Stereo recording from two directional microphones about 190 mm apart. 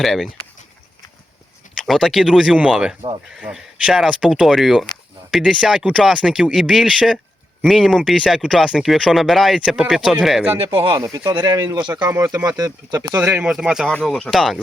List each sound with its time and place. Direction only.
0.0 s speech: centre (ahead or behind)
1.7 s speech: centre (ahead or behind)
10.6 s speech: 25° right (ahead or behind)
13.1 s speech: 10° right (ahead or behind)